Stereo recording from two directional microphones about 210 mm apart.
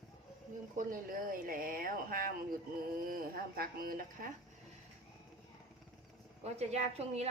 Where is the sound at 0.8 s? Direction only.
40° right (ahead or behind).